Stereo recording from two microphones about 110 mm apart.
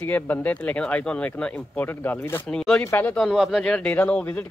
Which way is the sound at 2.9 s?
15° left (ahead or behind).